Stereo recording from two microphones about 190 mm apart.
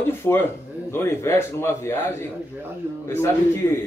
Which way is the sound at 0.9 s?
15° left (ahead or behind).